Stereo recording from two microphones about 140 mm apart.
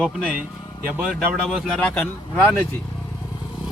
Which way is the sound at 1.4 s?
5° left (ahead or behind).